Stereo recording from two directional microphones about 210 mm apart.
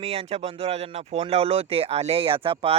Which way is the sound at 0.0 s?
30° right (ahead or behind).